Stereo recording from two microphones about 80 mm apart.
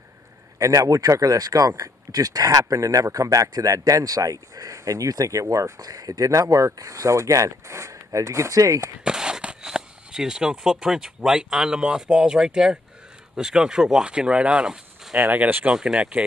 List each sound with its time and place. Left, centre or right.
0.6 s speech: right
9.0 s speech: centre
15.3 s speech: centre